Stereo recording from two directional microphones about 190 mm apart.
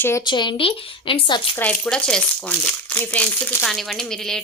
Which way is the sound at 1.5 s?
5° left (ahead or behind).